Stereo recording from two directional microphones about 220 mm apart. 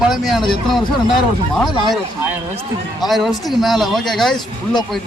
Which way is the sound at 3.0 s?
Centre (ahead or behind).